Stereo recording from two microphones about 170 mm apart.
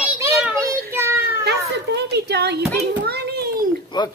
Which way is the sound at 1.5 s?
75° right (ahead or behind).